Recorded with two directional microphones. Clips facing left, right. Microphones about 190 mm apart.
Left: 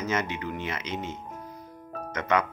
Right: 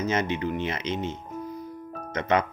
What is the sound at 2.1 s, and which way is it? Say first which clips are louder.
Speech: right 2 dB; 25° right (ahead or behind).